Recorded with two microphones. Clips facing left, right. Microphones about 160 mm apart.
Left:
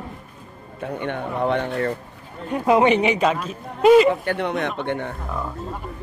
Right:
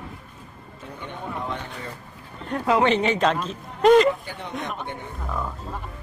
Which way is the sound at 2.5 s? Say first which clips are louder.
Left 4 dB; 15° left (ahead or behind).